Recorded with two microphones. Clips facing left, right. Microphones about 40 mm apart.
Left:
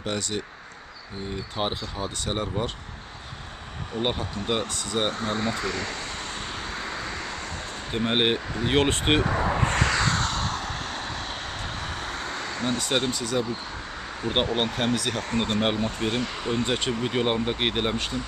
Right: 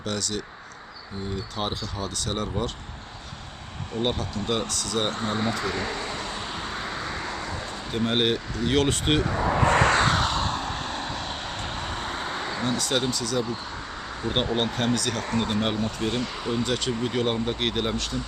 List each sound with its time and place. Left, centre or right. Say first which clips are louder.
0.0 s speech: left 1 dB; left
1.5 s speech: left 3 dB; centre
4.0 s speech: right 1 dB; centre
5.1 s speech: right 1 dB; centre
6.5 s vehicle: right 1 dB; centre
7.4 s a sound: right 2 dB; left
7.9 s speech: even; centre
9.1 s speech: even; centre
9.7 s a sound: right 4 dB; right
10.1 s vehicle: right 2 dB; centre
12.7 s speech: left 1 dB; centre
14.2 s speech: left 1 dB; centre
16.6 s speech: even; left